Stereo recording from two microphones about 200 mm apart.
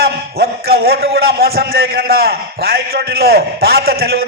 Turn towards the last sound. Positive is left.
turn(degrees=-50)  # may be behind; listen again after turning